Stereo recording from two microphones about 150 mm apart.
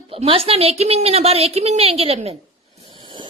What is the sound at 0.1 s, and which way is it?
A woman's voice, 40° right (ahead or behind).